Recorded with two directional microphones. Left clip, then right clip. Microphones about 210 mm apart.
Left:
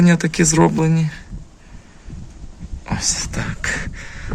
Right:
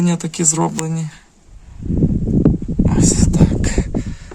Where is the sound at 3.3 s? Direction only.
10° right (ahead or behind).